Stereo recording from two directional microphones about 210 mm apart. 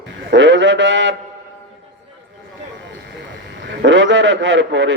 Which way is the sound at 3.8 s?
60° right (ahead or behind).